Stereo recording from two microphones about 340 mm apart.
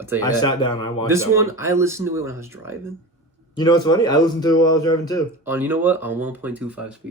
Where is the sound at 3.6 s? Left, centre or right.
Centre.